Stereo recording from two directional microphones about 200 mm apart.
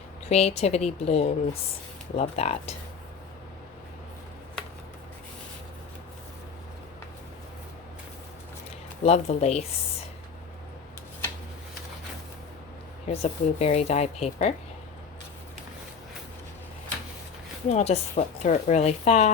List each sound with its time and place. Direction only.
0.3 s a woman's voice: 30° left (ahead or behind)
9.0 s a woman's voice: 30° left (ahead or behind)
13.1 s a woman's voice: 35° left (ahead or behind)
17.7 s a woman's voice: 35° left (ahead or behind)